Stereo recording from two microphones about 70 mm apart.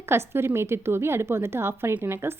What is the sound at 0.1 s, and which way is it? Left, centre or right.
A woman's voice, right.